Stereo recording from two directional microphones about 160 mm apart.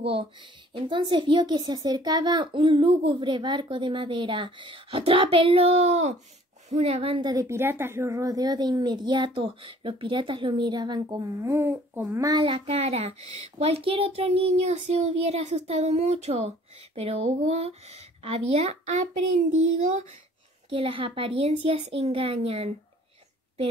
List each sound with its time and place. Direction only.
0.1 s a woman's voice: 35° right (ahead or behind)
20.7 s a woman's voice: 35° right (ahead or behind)